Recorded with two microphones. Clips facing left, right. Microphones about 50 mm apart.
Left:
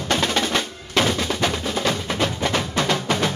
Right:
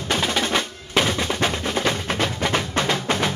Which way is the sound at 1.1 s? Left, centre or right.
Centre.